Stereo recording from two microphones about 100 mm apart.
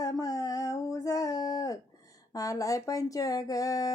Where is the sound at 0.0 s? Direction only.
35° left (ahead or behind).